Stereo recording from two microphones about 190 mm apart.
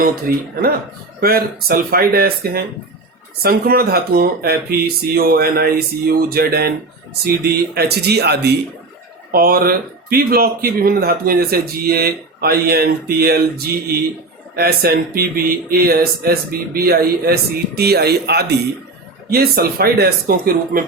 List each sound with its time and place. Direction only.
0.0 s speech: 50° right (ahead or behind)